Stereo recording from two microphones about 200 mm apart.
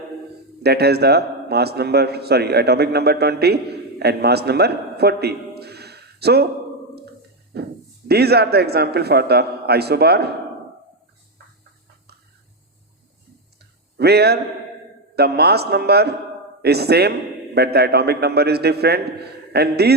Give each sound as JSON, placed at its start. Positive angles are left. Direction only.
{"t": 0.6, "sound": "a man's voice", "side_deg": -55}
{"t": 7.5, "sound": "a man's voice", "side_deg": -55}
{"t": 13.6, "sound": "a sound", "side_deg": -55}
{"t": 15.1, "sound": "a man's voice", "side_deg": -55}